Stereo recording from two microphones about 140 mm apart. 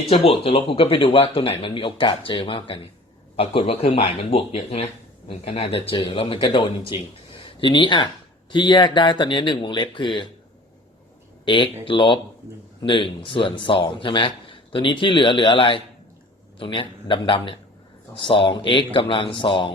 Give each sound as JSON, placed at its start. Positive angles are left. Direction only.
{"t": 0.1, "sound": "a man's voice", "side_deg": 45}
{"t": 11.4, "sound": "a man's voice", "side_deg": 35}